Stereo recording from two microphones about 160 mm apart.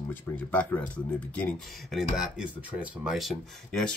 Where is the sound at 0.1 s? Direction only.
10° left (ahead or behind).